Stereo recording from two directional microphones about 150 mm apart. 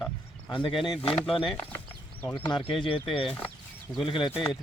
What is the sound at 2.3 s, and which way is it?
Speech, 35° left (ahead or behind).